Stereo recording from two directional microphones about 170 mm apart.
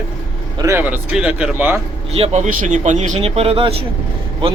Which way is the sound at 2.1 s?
40° right (ahead or behind).